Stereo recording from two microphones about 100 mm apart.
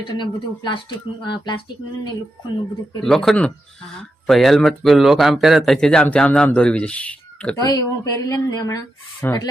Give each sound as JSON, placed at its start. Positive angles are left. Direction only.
{"t": 0.2, "sound": "speech", "side_deg": 55}
{"t": 3.0, "sound": "speech", "side_deg": 5}
{"t": 7.6, "sound": "speech", "side_deg": 40}